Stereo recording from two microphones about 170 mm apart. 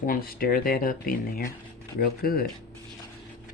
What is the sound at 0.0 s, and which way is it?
Speech, 60° left (ahead or behind).